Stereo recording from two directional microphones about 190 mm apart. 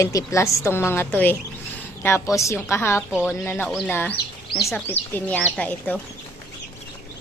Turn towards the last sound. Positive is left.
turn(degrees=5)  # may be behind; listen again after turning